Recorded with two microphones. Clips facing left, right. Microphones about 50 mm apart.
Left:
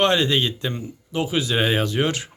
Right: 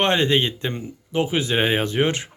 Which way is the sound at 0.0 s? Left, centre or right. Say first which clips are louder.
Even; right.